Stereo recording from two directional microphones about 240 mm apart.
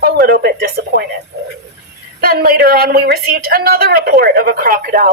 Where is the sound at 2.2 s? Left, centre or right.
Right.